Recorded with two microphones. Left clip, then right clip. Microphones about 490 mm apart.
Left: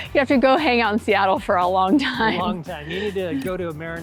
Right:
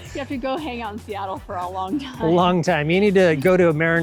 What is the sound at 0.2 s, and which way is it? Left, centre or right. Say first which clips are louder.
Speech: left 10 dB; left.